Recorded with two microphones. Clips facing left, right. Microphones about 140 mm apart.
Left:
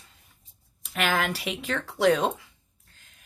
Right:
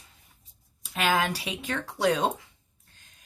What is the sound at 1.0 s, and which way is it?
Speech, 20° right (ahead or behind).